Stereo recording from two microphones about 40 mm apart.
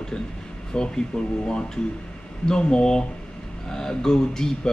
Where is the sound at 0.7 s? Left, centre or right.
Left.